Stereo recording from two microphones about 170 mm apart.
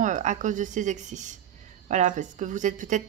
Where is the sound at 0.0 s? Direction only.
45° right (ahead or behind).